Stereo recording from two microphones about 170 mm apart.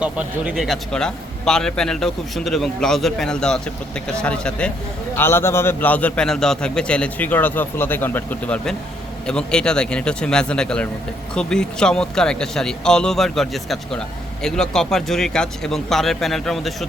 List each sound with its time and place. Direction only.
0.0 s a man's voice: 5° right (ahead or behind)